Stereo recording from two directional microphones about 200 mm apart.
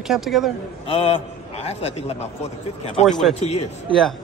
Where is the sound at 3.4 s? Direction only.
35° left (ahead or behind).